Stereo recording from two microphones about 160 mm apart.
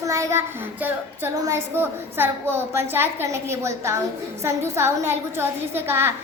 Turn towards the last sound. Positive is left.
turn(degrees=-15)  # may be behind; listen again after turning